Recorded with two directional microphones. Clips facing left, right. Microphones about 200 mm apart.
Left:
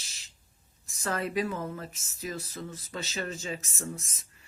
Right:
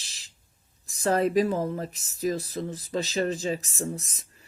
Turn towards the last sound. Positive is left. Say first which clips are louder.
# right 6 dB
turn(degrees=-35)  # may be behind; listen again after turning